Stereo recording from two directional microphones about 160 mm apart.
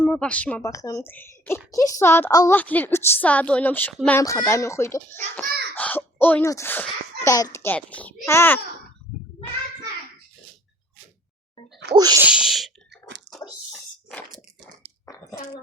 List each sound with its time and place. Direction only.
0.0 s a woman's voice: 10° left (ahead or behind)
4.2 s a woman's voice: 15° left (ahead or behind)
11.9 s sneeze: 25° right (ahead or behind)
12.2 s speech: 5° right (ahead or behind)
13.3 s a sound: centre (ahead or behind)
15.0 s a sound: 20° left (ahead or behind)